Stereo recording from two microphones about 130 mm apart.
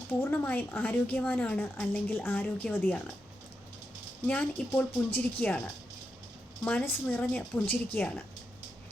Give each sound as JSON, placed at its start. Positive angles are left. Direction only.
{"t": 0.1, "sound": "a woman's voice", "side_deg": 15}
{"t": 4.3, "sound": "a woman's voice", "side_deg": 10}
{"t": 6.7, "sound": "a woman's voice", "side_deg": 10}